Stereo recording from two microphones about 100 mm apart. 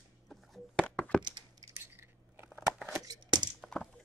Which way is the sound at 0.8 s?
10° left (ahead or behind).